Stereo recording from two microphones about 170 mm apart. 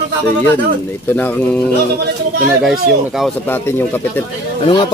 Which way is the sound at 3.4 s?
10° left (ahead or behind).